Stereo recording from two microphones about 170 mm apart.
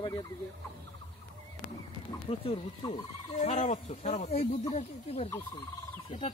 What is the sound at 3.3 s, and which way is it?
Speech, 45° left (ahead or behind).